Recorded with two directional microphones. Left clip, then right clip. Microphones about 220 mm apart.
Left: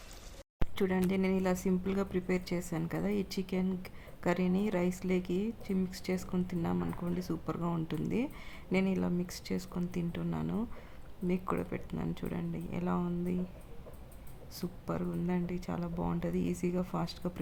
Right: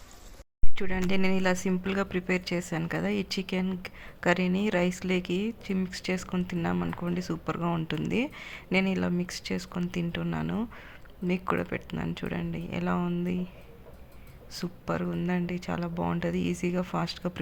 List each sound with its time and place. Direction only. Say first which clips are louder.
0.8 s speech: right 2 dB; 15° right (ahead or behind)
14.5 s speech: right 6 dB; 15° right (ahead or behind)